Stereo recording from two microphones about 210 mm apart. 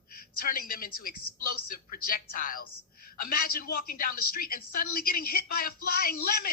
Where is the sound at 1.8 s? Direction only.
40° left (ahead or behind).